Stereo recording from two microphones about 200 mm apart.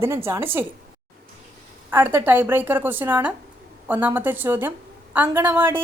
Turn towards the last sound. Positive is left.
turn(degrees=-10)  # may be behind; listen again after turning